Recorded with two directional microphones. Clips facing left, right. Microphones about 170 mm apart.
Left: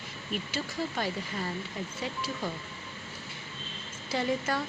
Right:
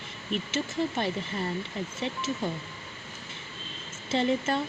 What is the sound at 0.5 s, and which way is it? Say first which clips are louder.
Speech: right 5 dB; 25° right (ahead or behind).